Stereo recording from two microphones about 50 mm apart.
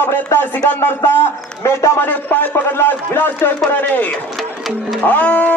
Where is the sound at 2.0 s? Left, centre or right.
Left.